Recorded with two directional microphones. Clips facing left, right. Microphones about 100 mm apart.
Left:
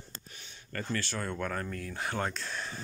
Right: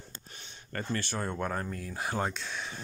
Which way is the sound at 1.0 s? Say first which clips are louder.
Right 2 dB; 15° right (ahead or behind).